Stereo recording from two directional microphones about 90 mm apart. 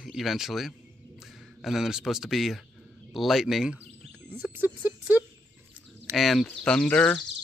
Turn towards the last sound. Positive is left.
turn(degrees=15)  # may be behind; listen again after turning